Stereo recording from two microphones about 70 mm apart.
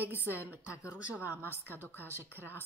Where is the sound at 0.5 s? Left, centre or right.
Centre.